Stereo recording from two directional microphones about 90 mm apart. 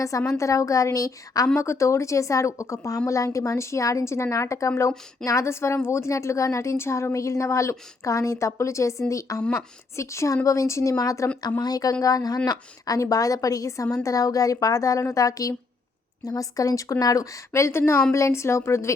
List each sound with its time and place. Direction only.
0.3 s a woman's voice: 35° left (ahead or behind)